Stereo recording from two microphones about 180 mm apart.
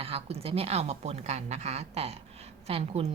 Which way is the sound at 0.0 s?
35° right (ahead or behind).